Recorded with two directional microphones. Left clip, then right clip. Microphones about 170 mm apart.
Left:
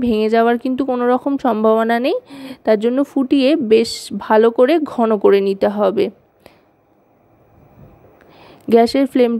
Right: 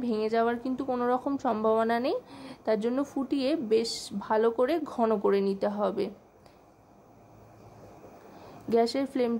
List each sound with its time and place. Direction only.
0.0 s a woman's voice: 50° left (ahead or behind)
0.8 s speech: 30° left (ahead or behind)
1.1 s a woman's voice: 40° left (ahead or behind)
8.4 s speech: 45° left (ahead or behind)